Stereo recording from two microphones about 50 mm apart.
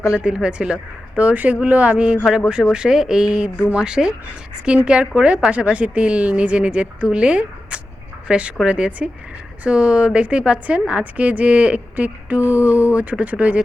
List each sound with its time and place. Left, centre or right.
0.0 s a woman's voice: centre
2.6 s speech: left
2.9 s a woman's voice: centre; by 12.6 s right
12.6 s speech: left
13.0 s a woman's voice: right